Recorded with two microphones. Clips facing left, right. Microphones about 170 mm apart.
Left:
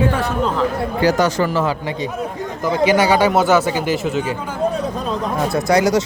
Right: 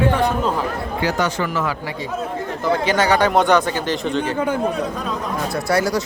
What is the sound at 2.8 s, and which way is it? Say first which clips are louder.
Speech: left 5 dB; 10° left (ahead or behind).